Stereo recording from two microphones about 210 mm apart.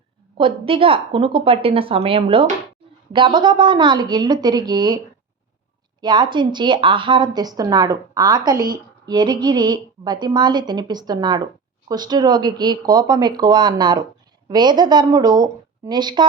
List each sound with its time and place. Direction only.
0.3 s speech: 25° right (ahead or behind)
6.0 s speech: 20° right (ahead or behind)